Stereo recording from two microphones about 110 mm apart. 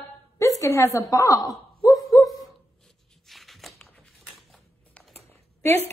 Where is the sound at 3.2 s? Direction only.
Centre (ahead or behind).